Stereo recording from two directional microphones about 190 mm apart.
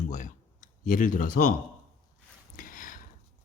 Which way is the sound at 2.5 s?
45° left (ahead or behind).